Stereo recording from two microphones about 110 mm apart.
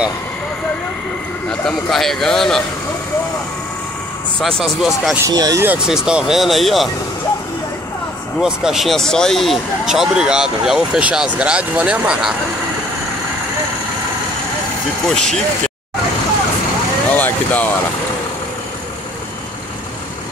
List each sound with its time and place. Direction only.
1.5 s speech: 5° left (ahead or behind)
4.4 s speech: 5° left (ahead or behind)
5.2 s speech: 35° right (ahead or behind)
5.8 s speech: 5° right (ahead or behind)
8.4 s speech: 5° right (ahead or behind)
15.0 s speech: 5° left (ahead or behind)
17.1 s vehicle: 15° left (ahead or behind)